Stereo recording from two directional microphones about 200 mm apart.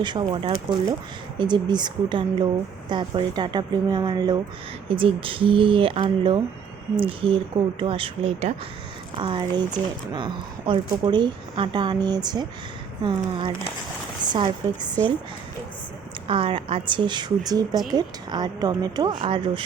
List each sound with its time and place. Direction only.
0.0 s speech: 20° right (ahead or behind)
16.2 s speech: 25° right (ahead or behind)